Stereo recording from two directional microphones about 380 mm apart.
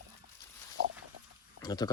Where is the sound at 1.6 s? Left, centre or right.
Centre.